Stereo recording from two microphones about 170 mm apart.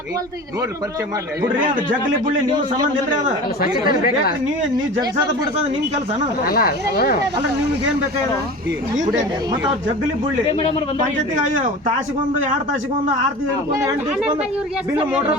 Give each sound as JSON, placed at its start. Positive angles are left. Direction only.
{"t": 3.6, "sound": "speech", "side_deg": 60}
{"t": 6.4, "sound": "speech", "side_deg": 60}